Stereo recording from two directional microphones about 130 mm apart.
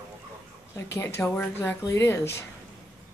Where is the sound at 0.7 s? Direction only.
20° left (ahead or behind).